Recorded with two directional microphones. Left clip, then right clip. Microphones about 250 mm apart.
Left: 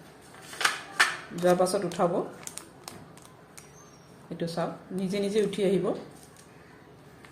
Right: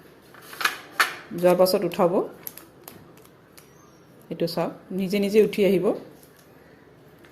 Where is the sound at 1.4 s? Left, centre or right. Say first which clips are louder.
Right 5 dB; right.